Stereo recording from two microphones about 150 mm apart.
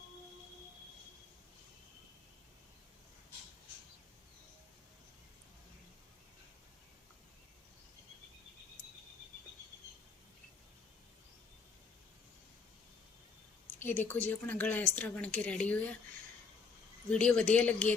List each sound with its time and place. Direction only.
13.8 s a woman's voice: 15° left (ahead or behind)
17.2 s a woman's voice: 5° left (ahead or behind)